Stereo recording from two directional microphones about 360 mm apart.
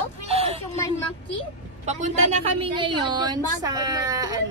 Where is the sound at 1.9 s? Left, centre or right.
Centre.